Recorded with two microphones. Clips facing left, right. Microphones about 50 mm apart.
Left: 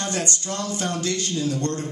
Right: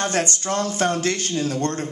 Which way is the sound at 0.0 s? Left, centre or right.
Right.